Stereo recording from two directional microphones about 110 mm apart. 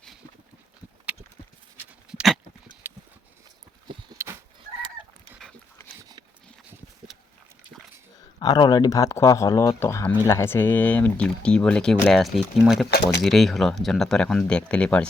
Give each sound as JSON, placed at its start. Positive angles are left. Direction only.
{"t": 2.0, "sound": "dog", "side_deg": -5}
{"t": 2.8, "sound": "clip-clop", "side_deg": -20}
{"t": 4.2, "sound": "fowl", "side_deg": -25}
{"t": 8.4, "sound": "speech", "side_deg": 40}